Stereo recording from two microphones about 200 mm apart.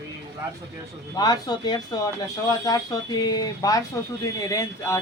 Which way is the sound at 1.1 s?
20° left (ahead or behind).